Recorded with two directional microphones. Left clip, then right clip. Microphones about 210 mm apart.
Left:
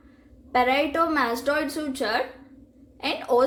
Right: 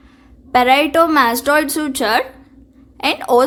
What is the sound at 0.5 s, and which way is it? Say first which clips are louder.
A woman's voice: right 10 dB; 35° right (ahead or behind).